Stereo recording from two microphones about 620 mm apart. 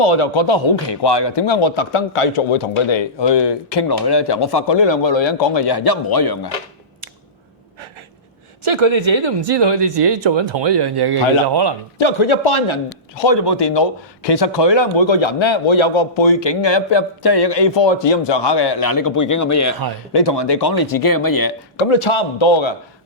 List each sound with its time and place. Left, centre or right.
0.0 s a man's voice: left
8.7 s speech: right
11.9 s a man's voice: left
20.1 s a man's voice: left
21.8 s a man's voice: left